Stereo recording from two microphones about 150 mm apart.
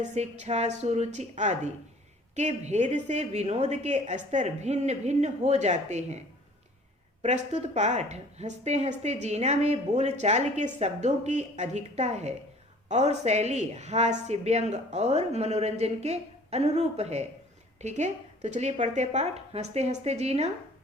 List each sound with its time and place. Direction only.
0.0 s a woman's voice: 50° right (ahead or behind)